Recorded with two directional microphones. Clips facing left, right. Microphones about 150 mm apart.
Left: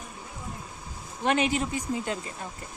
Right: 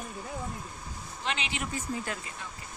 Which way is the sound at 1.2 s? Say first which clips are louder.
Left 10 dB; 50° left (ahead or behind).